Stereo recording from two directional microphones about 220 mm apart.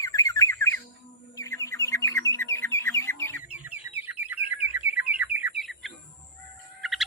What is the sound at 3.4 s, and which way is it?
Chicken, 5° right (ahead or behind).